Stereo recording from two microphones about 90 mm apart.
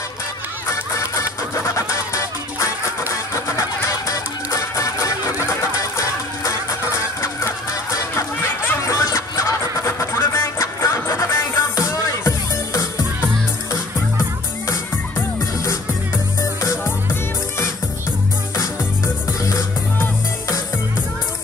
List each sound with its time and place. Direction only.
0.7 s music: 35° left (ahead or behind)
3.1 s music: 40° left (ahead or behind)
16.6 s music: 25° left (ahead or behind)
20.0 s music: 35° left (ahead or behind)